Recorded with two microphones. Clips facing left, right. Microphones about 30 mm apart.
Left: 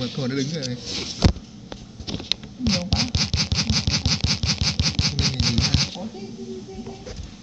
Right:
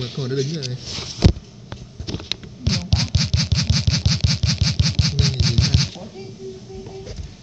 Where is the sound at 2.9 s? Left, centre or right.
Centre.